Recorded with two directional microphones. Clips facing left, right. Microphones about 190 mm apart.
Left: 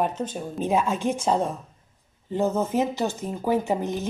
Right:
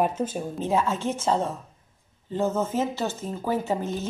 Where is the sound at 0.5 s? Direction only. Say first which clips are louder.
Left 2 dB; 15° left (ahead or behind).